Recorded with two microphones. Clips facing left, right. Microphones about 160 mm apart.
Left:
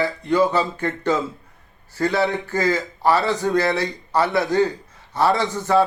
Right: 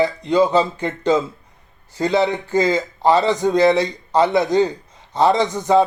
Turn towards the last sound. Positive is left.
turn(degrees=-20)  # may be behind; listen again after turning